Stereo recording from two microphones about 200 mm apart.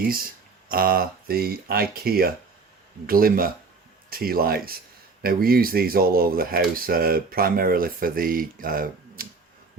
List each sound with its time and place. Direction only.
0.7 s speech: 45° right (ahead or behind)